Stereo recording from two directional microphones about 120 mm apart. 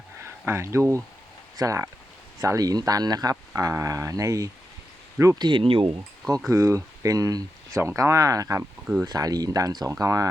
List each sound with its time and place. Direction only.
0.2 s speech: 20° right (ahead or behind)
5.4 s speech: 40° right (ahead or behind)
6.5 s speech: 25° right (ahead or behind)